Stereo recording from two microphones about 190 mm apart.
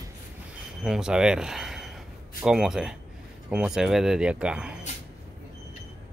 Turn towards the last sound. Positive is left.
turn(degrees=-5)  # may be behind; listen again after turning